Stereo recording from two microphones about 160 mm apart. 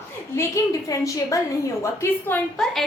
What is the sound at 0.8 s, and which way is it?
A woman's voice, 20° left (ahead or behind).